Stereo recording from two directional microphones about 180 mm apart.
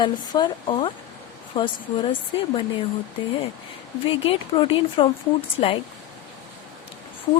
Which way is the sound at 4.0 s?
30° left (ahead or behind).